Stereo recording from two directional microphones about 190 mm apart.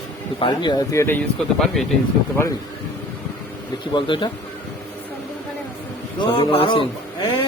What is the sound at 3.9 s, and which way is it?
Speech, 25° left (ahead or behind).